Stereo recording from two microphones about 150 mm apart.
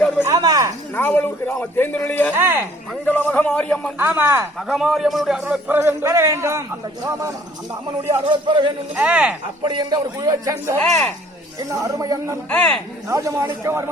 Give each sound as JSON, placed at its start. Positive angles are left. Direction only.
{"t": 0.3, "sound": "a sound", "side_deg": -25}
{"t": 0.9, "sound": "a man's voice", "side_deg": 15}
{"t": 2.4, "sound": "a man's voice", "side_deg": -15}
{"t": 3.1, "sound": "a man's voice", "side_deg": 10}
{"t": 3.9, "sound": "a man's voice", "side_deg": -15}
{"t": 4.7, "sound": "a man's voice", "side_deg": 0}
{"t": 8.3, "sound": "speech", "side_deg": -30}
{"t": 9.0, "sound": "a man's voice", "side_deg": -10}
{"t": 9.6, "sound": "speech", "side_deg": -30}
{"t": 10.8, "sound": "speech", "side_deg": 5}
{"t": 11.7, "sound": "speech", "side_deg": -25}
{"t": 12.5, "sound": "a man's voice", "side_deg": 10}
{"t": 13.1, "sound": "speech", "side_deg": -20}